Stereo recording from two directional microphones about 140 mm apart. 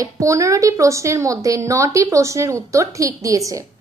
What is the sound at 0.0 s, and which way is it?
A woman's voice, 20° right (ahead or behind).